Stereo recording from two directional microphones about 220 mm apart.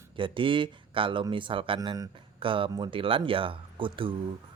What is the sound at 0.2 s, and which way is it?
Speech, 25° right (ahead or behind).